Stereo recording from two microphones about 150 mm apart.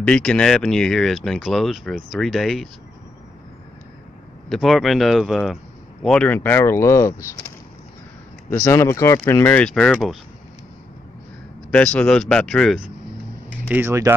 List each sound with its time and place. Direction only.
0.0 s speech: 5° left (ahead or behind)
4.5 s speech: centre (ahead or behind); by 7.2 s 20° left (ahead or behind)
8.5 s speech: 20° left (ahead or behind); by 10.1 s 5° left (ahead or behind)
11.7 s speech: 5° left (ahead or behind)
13.5 s speech: 10° right (ahead or behind)